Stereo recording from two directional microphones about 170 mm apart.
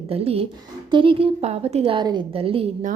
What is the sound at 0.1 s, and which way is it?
A woman's voice, 35° right (ahead or behind).